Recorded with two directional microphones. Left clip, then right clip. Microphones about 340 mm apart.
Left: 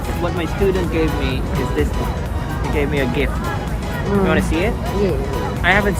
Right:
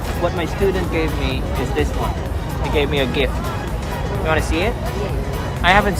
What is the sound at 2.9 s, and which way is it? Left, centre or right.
Speech, centre.